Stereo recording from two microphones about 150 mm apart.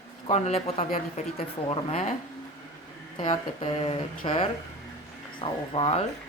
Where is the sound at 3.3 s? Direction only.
40° left (ahead or behind).